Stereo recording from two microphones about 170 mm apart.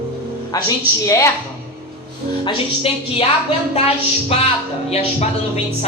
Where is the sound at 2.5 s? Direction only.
35° left (ahead or behind).